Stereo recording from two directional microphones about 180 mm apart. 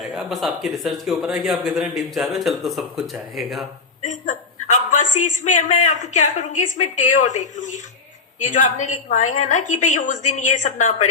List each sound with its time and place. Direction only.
0.0 s speech: centre (ahead or behind)
4.0 s a sound: 40° left (ahead or behind)
5.1 s a woman's voice: 45° left (ahead or behind)